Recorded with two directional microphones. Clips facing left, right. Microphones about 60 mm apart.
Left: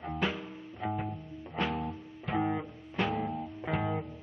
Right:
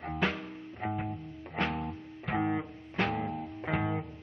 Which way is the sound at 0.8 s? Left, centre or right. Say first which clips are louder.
Even; right.